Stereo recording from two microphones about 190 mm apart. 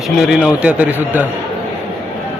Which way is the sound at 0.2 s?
Centre (ahead or behind).